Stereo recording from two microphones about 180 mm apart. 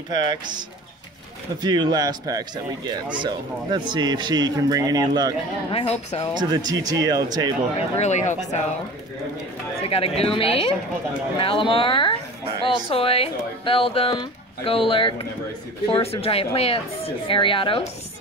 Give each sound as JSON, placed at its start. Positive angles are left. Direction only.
{"t": 0.1, "sound": "speech", "side_deg": -25}
{"t": 5.7, "sound": "speech", "side_deg": 35}
{"t": 6.5, "sound": "speech", "side_deg": -20}
{"t": 8.0, "sound": "speech", "side_deg": 40}
{"t": 9.8, "sound": "speech", "side_deg": 30}